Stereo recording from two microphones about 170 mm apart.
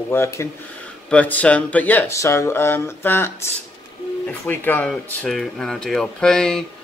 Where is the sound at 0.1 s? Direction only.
15° left (ahead or behind).